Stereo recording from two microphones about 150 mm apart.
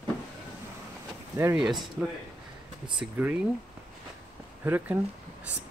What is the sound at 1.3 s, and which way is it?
Speech, 15° right (ahead or behind).